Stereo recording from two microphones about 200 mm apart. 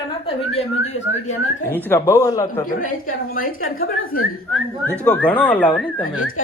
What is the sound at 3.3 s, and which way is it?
Speech, 45° left (ahead or behind).